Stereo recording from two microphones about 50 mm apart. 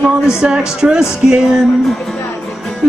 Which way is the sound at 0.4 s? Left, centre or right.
Centre.